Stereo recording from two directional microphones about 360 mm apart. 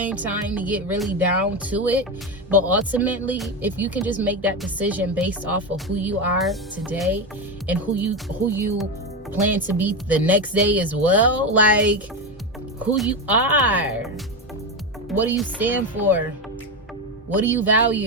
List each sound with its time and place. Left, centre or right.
0.1 s speech: centre
15.2 s speech: centre
17.4 s speech: centre